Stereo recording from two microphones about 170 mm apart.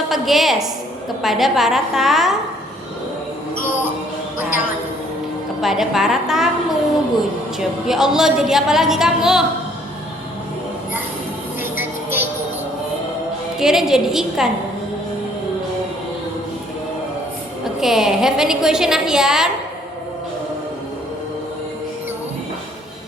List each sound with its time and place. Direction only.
0.1 s a woman's voice: centre (ahead or behind)
5.6 s a woman's voice: centre (ahead or behind)
11.6 s music: 10° right (ahead or behind)
13.6 s a woman's voice: centre (ahead or behind)
17.7 s a woman's voice: centre (ahead or behind)